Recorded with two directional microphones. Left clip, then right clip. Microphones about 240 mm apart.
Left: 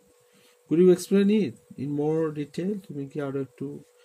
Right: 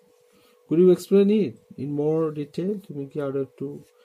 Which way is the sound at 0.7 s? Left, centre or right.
Centre.